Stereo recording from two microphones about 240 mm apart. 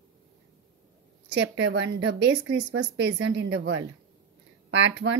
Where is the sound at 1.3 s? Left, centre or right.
Right.